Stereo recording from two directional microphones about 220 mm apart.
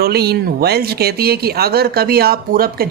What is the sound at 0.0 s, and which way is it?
Speech, 45° right (ahead or behind).